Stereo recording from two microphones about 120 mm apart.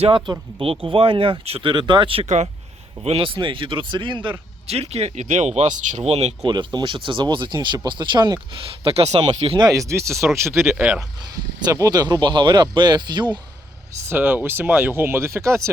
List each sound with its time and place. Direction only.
0.0 s speech: 50° right (ahead or behind)
2.2 s speech: 75° right (ahead or behind)
3.0 s speech: 55° right (ahead or behind)
4.6 s speech: 60° right (ahead or behind)
6.4 s speech: 40° right (ahead or behind)
8.8 s speech: 55° right (ahead or behind)
9.6 s speech: 30° right (ahead or behind)
10.6 s speech: 5° right (ahead or behind)
11.6 s speech: 30° right (ahead or behind)
14.0 s speech: 20° right (ahead or behind)